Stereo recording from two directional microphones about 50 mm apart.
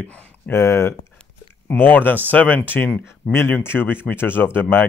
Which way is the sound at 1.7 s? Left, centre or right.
Left.